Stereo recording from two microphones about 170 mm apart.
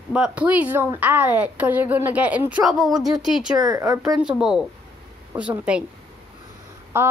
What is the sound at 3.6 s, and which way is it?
Speech, 20° right (ahead or behind).